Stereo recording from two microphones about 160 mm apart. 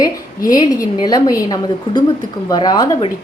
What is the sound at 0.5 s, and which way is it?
A woman's voice, 25° left (ahead or behind).